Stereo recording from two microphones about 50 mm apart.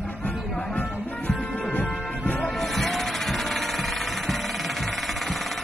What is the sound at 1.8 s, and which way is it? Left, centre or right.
Music, centre.